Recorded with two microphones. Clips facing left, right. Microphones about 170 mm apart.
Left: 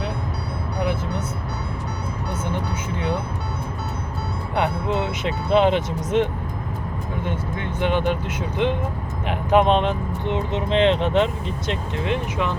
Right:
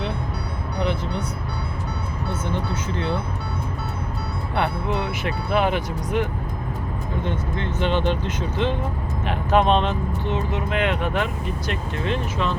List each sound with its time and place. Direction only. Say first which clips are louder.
4.5 s speech: left 2 dB; 20° left (ahead or behind)
7.3 s speech: right 1 dB; 10° left (ahead or behind)